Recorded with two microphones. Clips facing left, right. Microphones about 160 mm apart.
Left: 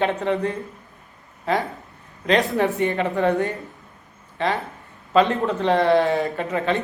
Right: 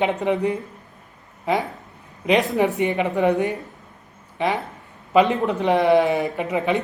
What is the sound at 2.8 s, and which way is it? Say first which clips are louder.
A man's voice: right 1 dB; 15° right (ahead or behind).